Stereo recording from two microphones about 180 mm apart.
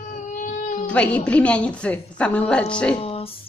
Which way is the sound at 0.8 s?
5° left (ahead or behind).